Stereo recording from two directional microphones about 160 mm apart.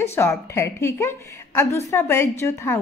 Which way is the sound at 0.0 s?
15° left (ahead or behind).